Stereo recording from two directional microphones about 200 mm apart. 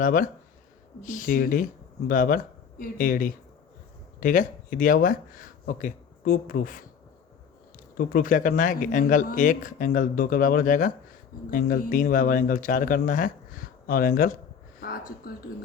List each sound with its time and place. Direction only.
0.0 s speech: 40° left (ahead or behind)
7.9 s speech: 45° left (ahead or behind)
14.8 s a sound: 45° left (ahead or behind)
15.3 s speech: 50° left (ahead or behind)